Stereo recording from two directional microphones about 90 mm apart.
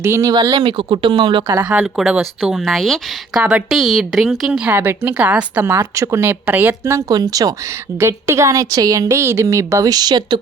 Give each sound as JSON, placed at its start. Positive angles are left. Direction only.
{"t": 0.0, "sound": "a woman's voice", "side_deg": -30}
{"t": 0.5, "sound": "speech", "side_deg": -60}
{"t": 1.6, "sound": "speech", "side_deg": -20}
{"t": 2.0, "sound": "speech", "side_deg": -5}
{"t": 4.7, "sound": "speech", "side_deg": -25}
{"t": 5.8, "sound": "speech", "side_deg": -35}
{"t": 7.1, "sound": "speech", "side_deg": -45}
{"t": 7.9, "sound": "a woman's voice", "side_deg": -30}